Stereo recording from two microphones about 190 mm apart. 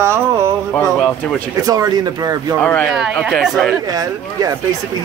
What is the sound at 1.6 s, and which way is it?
Speech, 20° right (ahead or behind).